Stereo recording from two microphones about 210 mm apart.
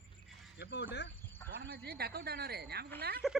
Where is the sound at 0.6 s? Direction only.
55° left (ahead or behind).